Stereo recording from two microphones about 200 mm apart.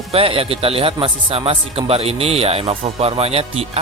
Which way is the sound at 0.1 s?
30° right (ahead or behind).